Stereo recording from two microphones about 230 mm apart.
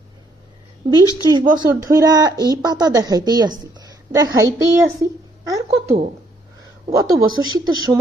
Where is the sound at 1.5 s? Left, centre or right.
Centre.